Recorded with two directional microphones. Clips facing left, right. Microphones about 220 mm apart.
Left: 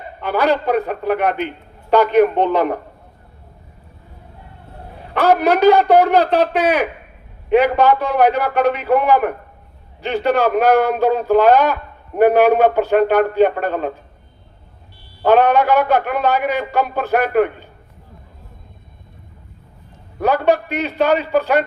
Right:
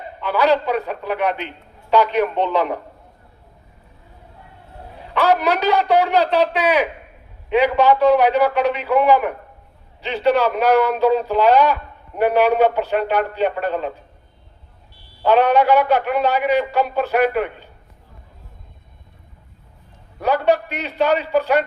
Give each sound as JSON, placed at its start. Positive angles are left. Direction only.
{"t": 0.2, "sound": "a man's voice", "side_deg": 50}
{"t": 5.1, "sound": "a man's voice", "side_deg": 50}
{"t": 14.9, "sound": "a man's voice", "side_deg": 50}
{"t": 20.2, "sound": "a man's voice", "side_deg": 50}